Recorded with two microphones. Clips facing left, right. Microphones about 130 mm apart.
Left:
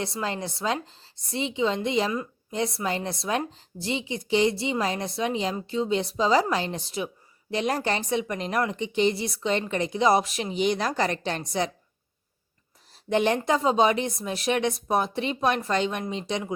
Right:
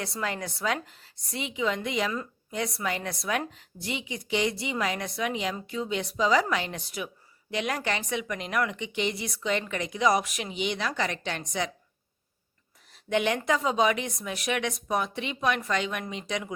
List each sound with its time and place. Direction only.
0.0 s a woman's voice: 25° left (ahead or behind)
13.1 s speech: 35° left (ahead or behind)